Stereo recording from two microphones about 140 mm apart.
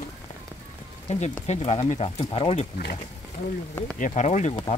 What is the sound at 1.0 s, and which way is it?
Speech, 50° left (ahead or behind).